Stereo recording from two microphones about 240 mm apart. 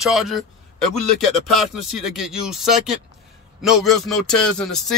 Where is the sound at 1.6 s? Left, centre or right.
Centre.